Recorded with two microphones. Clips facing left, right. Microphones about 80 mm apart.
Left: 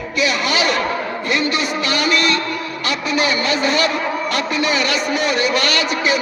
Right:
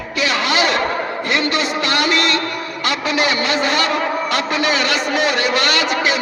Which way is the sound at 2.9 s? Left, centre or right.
Right.